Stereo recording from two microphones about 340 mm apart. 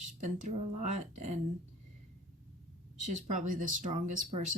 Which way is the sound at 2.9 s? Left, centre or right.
Right.